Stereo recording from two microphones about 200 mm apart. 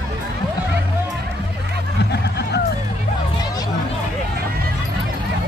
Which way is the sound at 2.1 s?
55° left (ahead or behind).